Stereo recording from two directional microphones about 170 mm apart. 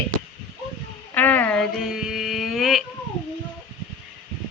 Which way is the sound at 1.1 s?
10° left (ahead or behind).